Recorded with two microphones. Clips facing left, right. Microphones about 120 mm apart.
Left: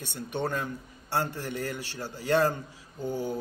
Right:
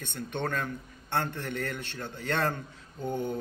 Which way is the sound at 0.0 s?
10° left (ahead or behind).